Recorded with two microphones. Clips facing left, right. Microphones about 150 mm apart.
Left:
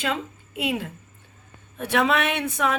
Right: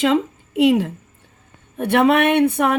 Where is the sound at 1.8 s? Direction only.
55° right (ahead or behind).